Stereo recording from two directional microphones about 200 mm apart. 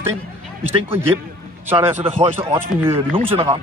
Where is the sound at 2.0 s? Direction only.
30° right (ahead or behind).